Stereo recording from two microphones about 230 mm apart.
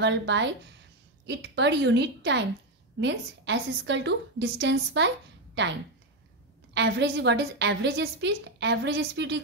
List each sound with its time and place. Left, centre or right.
0.0 s a woman's voice: right